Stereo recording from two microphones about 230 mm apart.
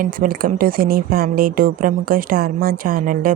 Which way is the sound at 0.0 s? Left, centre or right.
Right.